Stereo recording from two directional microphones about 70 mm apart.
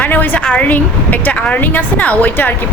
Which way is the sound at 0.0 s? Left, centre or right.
Left.